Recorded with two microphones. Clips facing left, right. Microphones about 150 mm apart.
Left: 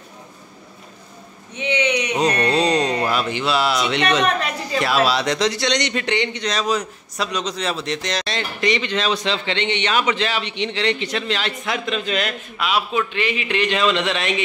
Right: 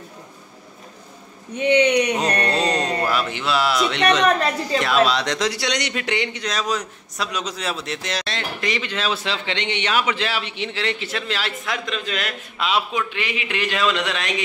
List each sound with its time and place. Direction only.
1.6 s speech: 55° right (ahead or behind)
2.1 s a sound: centre (ahead or behind)
2.8 s a sound: 20° left (ahead or behind)
3.1 s a man's voice: centre (ahead or behind)
5.5 s a man's voice: 10° right (ahead or behind)
12.5 s a man's voice: 25° right (ahead or behind)
12.9 s a man's voice: 10° right (ahead or behind)